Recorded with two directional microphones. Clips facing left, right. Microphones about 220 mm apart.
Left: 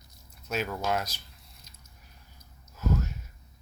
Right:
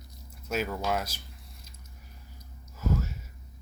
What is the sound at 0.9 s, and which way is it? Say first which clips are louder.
Speech: left 3 dB; 5° right (ahead or behind).